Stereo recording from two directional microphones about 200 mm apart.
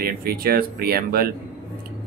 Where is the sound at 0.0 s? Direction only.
50° right (ahead or behind).